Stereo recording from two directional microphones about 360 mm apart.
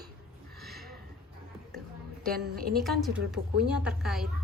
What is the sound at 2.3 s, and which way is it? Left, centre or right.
Speech, right.